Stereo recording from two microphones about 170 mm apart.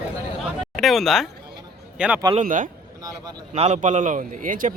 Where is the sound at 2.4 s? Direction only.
50° right (ahead or behind).